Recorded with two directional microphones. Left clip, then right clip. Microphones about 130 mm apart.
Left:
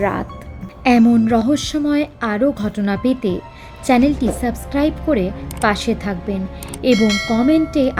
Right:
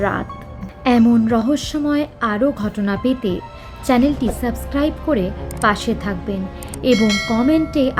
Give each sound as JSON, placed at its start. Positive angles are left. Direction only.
{"t": 0.0, "sound": "a woman's voice", "side_deg": 35}
{"t": 6.9, "sound": "speech", "side_deg": 0}
{"t": 7.7, "sound": "a woman's voice", "side_deg": 20}